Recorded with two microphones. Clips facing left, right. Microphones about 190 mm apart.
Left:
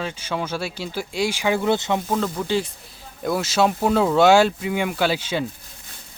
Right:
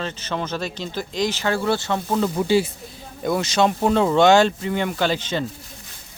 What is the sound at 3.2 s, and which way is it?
Speech, centre (ahead or behind).